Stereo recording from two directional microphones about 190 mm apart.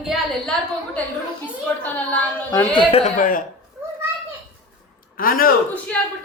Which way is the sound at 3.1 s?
45° left (ahead or behind).